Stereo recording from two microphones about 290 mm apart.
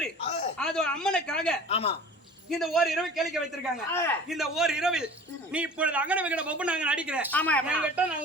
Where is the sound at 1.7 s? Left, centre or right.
Centre.